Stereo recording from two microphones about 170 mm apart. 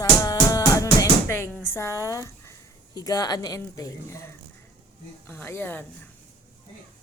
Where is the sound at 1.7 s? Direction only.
15° left (ahead or behind).